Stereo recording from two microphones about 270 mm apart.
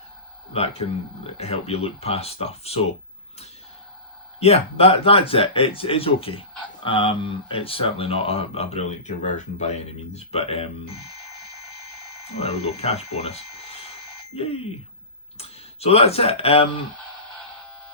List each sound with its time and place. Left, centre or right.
0.5 s speech: left
4.4 s speech: left
12.4 s speech: left